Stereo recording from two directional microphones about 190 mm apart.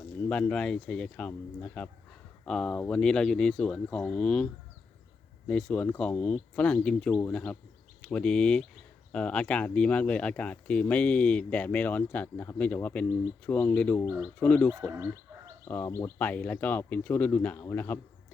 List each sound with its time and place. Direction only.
0.3 s speech: 5° left (ahead or behind)
5.5 s speech: 5° left (ahead or behind)
14.9 s chicken: 15° right (ahead or behind)
15.6 s speech: 15° left (ahead or behind)